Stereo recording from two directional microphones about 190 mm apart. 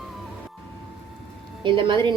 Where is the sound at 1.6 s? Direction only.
25° right (ahead or behind).